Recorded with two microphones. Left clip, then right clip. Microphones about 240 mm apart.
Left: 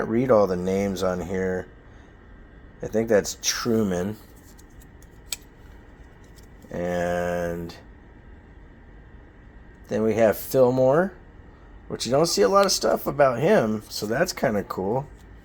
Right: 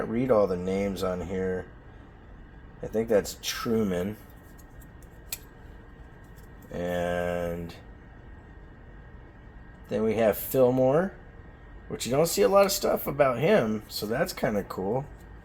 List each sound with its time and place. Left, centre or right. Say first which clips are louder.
0.0 s speech: left 4 dB; left
2.8 s speech: left 4 dB; left
6.7 s speech: left 4 dB; left
9.9 s speech: left 4 dB; left
12.5 s speech: left 1 dB; centre
12.8 s speech: left 4 dB; left